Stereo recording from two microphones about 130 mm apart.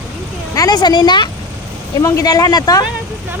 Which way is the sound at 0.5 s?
30° left (ahead or behind).